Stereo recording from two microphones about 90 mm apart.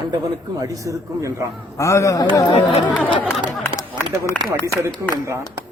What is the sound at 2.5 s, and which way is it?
Speech, 90° left.